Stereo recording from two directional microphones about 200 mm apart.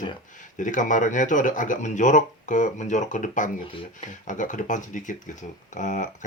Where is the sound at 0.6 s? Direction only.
40° left (ahead or behind).